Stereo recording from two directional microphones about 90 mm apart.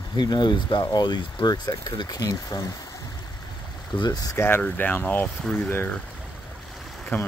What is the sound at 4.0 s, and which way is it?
Speech, 50° left (ahead or behind).